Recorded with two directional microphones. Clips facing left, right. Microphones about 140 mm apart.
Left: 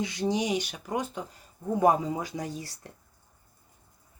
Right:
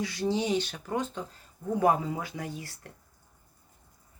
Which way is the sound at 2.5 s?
35° left (ahead or behind).